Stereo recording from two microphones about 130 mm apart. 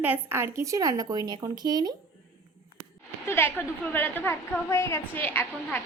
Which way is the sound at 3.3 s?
15° left (ahead or behind).